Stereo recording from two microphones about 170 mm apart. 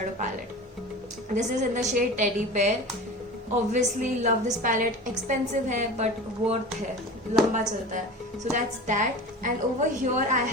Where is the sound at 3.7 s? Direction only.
45° right (ahead or behind).